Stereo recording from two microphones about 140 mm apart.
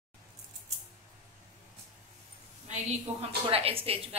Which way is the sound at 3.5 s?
45° right (ahead or behind).